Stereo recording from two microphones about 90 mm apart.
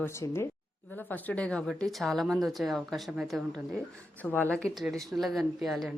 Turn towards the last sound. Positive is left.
turn(degrees=0)  # may be behind; listen again after turning